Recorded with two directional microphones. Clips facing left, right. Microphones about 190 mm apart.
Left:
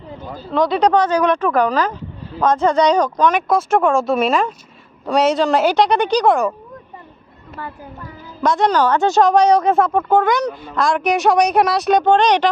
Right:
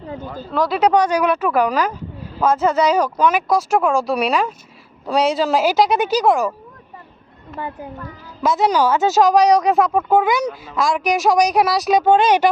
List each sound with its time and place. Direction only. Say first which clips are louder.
0.5 s a woman's voice: left 1 dB; 5° right (ahead or behind)
8.4 s a woman's voice: left 1 dB; 5° right (ahead or behind)